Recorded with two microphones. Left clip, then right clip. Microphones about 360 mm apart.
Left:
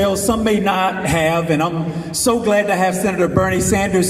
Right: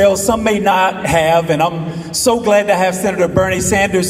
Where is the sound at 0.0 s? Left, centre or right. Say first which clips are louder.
Right 5 dB; centre.